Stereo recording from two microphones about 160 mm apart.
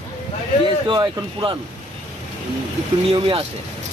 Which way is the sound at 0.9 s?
30° right (ahead or behind).